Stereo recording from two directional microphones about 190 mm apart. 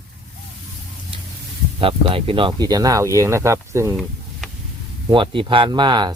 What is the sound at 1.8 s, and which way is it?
Speech, 30° right (ahead or behind).